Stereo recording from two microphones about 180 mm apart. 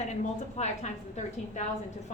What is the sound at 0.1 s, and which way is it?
A woman's voice, 40° left (ahead or behind).